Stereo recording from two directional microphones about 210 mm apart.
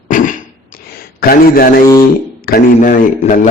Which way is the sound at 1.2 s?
45° left (ahead or behind).